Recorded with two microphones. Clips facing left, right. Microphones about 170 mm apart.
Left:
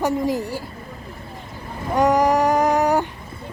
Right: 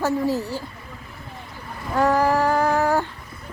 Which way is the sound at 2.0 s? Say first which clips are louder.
Left 2 dB; 15° left (ahead or behind).